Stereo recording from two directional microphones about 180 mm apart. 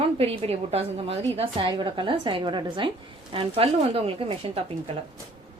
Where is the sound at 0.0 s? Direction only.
35° right (ahead or behind).